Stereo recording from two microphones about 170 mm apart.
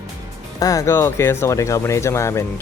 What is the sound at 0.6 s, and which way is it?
Speech, 20° left (ahead or behind).